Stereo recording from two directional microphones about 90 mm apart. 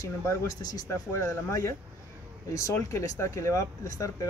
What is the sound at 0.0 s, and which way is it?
Speech, 35° left (ahead or behind).